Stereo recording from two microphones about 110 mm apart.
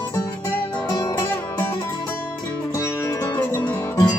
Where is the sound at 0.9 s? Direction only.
40° left (ahead or behind).